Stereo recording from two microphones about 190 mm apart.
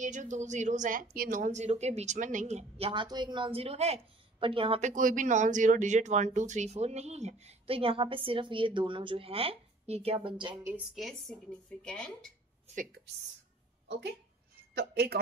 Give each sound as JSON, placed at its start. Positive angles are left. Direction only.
{"t": 0.0, "sound": "a woman's voice", "side_deg": -40}
{"t": 2.9, "sound": "a woman's voice", "side_deg": -25}
{"t": 11.0, "sound": "speech", "side_deg": 0}
{"t": 12.7, "sound": "a woman's voice", "side_deg": -55}
{"t": 14.7, "sound": "a sound", "side_deg": -60}